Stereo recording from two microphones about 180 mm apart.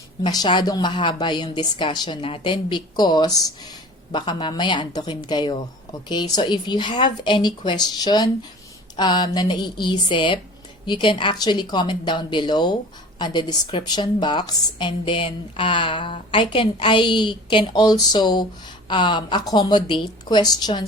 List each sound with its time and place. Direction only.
0.2 s a woman's voice: 25° left (ahead or behind)